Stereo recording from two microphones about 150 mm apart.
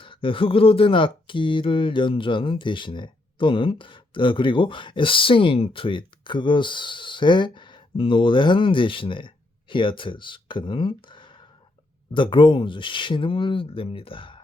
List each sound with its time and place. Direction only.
0.0 s speech: 35° left (ahead or behind)